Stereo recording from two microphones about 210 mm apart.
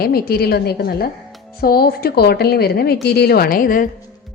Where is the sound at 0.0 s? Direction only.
45° left (ahead or behind).